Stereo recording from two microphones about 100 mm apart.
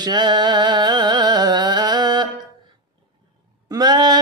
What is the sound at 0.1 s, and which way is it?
Music, 45° right (ahead or behind).